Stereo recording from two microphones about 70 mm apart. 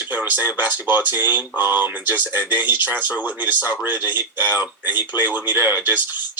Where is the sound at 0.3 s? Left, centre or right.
Right.